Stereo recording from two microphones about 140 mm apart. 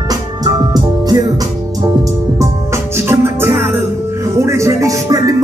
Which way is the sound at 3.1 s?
15° right (ahead or behind).